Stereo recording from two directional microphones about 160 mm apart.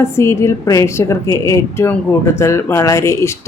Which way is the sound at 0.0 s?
15° left (ahead or behind).